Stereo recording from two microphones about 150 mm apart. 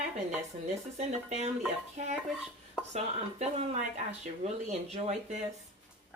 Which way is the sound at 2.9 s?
45° right (ahead or behind).